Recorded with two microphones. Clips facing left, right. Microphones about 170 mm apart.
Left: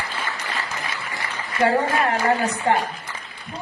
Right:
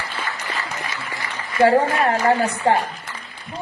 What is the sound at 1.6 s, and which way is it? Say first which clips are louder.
A woman's voice: right 4 dB; 40° right (ahead or behind).